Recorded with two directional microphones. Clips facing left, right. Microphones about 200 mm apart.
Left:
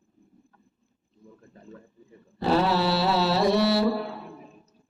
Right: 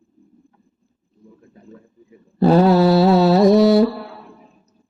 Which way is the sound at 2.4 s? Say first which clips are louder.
Right 10 dB; 45° right (ahead or behind).